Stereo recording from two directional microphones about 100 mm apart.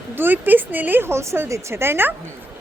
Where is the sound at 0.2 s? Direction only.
20° right (ahead or behind).